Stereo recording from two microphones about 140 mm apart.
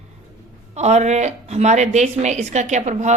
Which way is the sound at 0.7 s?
55° right (ahead or behind).